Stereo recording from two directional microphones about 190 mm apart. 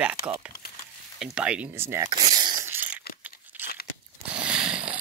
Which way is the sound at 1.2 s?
5° right (ahead or behind).